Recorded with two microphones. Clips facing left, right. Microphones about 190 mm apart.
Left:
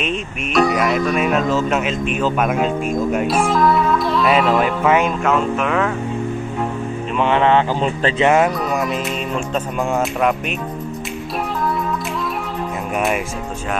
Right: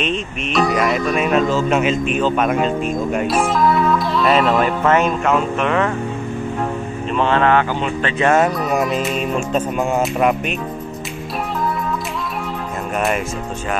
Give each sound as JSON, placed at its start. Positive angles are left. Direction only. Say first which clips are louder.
{"t": 0.0, "sound": "speech", "louder": "right 1 dB", "side_deg": 5}
{"t": 7.2, "sound": "speech", "louder": "even", "side_deg": 15}
{"t": 8.5, "sound": "speech", "louder": "right 2 dB", "side_deg": 0}